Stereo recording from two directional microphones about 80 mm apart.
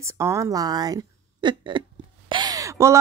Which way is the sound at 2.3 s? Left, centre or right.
Right.